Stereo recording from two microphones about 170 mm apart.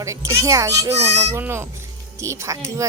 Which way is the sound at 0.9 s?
40° right (ahead or behind).